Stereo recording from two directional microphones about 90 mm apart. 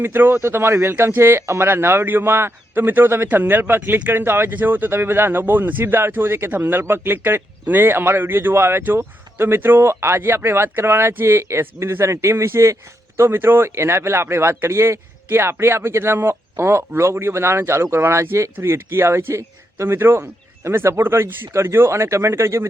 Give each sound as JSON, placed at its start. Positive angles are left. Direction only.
{"t": 0.0, "sound": "speech", "side_deg": -25}